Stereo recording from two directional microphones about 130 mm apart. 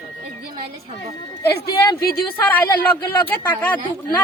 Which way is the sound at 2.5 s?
15° left (ahead or behind).